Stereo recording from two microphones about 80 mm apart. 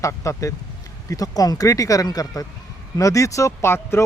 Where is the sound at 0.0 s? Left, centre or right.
Left.